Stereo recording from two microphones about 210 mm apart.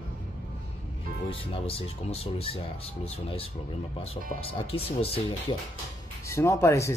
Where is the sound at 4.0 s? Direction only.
25° left (ahead or behind).